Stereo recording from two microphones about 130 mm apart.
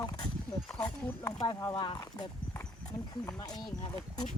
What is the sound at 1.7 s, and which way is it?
Speech, 30° left (ahead or behind).